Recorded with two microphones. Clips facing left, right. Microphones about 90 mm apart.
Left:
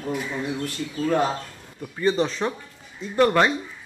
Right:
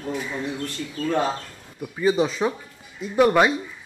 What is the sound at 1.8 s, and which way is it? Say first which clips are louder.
Speech: right 1 dB; 5° right (ahead or behind).